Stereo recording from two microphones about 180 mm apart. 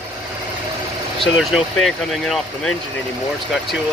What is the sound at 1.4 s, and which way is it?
Speech, centre (ahead or behind).